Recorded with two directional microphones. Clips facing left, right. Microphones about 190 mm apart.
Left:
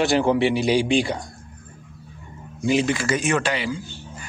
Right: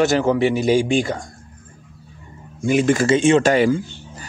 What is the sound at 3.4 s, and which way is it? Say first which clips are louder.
Speech: right 10 dB; 50° right (ahead or behind).